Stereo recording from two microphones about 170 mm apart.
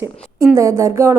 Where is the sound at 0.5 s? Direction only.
15° right (ahead or behind).